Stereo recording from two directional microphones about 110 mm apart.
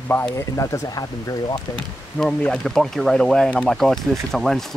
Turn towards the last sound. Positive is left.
turn(degrees=5)  # may be behind; listen again after turning